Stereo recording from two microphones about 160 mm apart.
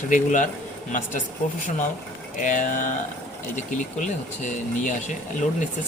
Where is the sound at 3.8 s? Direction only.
50° left (ahead or behind).